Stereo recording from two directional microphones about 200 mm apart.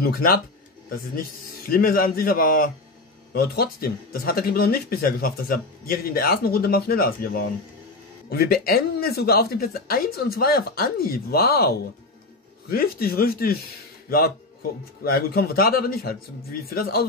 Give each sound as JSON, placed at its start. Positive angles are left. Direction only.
{"t": 0.0, "sound": "speech", "side_deg": 45}
{"t": 1.7, "sound": "speech", "side_deg": 45}